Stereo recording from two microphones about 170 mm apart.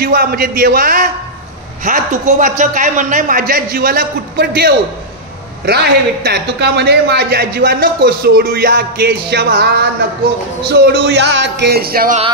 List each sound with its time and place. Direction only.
0.0 s a man's voice: 60° right (ahead or behind)
10.9 s music: 80° right; by 12.2 s 60° right (ahead or behind)